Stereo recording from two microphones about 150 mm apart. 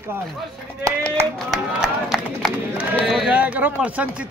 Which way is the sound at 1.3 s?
Centre (ahead or behind).